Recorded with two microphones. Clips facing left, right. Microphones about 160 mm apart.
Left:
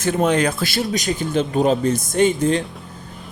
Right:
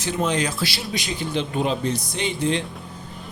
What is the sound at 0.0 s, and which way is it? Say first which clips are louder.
A man's voice: left 6 dB; 55° left (ahead or behind).